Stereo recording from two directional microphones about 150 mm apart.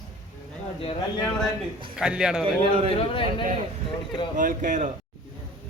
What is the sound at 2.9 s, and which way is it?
Speech, 35° left (ahead or behind).